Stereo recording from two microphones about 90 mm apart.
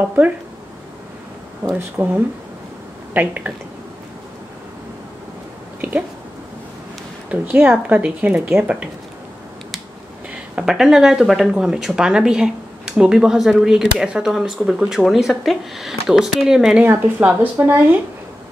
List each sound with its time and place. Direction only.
1.8 s speech: 20° right (ahead or behind)
5.8 s a sound: 20° right (ahead or behind)
7.2 s a woman's voice: 20° right (ahead or behind)
10.5 s speech: 5° right (ahead or behind)
16.8 s speech: 20° right (ahead or behind)